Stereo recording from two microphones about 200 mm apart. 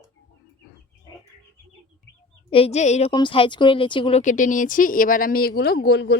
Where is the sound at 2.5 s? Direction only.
30° left (ahead or behind).